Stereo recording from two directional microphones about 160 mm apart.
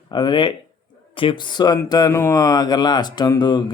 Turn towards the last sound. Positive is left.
turn(degrees=30)  # may be behind; listen again after turning